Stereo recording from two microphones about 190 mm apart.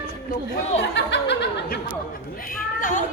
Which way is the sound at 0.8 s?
65° left (ahead or behind).